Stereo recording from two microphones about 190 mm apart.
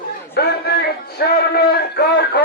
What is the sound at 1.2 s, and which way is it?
Speech, 55° left (ahead or behind).